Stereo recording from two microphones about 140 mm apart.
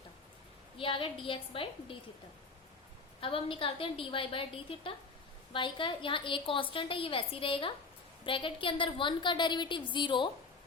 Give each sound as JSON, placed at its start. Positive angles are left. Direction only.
{"t": 0.8, "sound": "a woman's voice", "side_deg": 40}
{"t": 3.2, "sound": "a woman's voice", "side_deg": 40}